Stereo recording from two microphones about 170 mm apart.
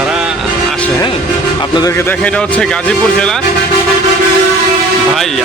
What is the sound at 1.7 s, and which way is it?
A man's voice, 20° left (ahead or behind).